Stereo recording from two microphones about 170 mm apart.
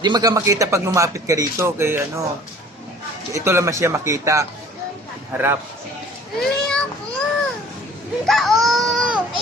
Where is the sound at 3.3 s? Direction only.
15° right (ahead or behind).